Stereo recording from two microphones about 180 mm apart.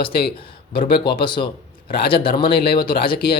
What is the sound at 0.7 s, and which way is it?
A man's voice, 30° left (ahead or behind).